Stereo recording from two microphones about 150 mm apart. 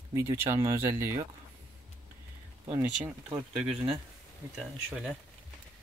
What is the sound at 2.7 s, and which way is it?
Speech, 15° right (ahead or behind).